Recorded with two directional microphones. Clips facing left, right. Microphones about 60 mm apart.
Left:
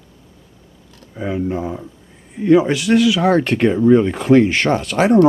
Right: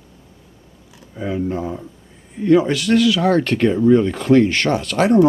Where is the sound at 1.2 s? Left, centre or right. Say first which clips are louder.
Left 1 dB; centre.